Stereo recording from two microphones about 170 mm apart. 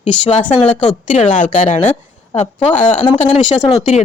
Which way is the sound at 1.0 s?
45° left (ahead or behind).